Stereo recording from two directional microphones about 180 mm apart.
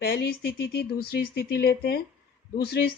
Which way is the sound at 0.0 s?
65° left (ahead or behind).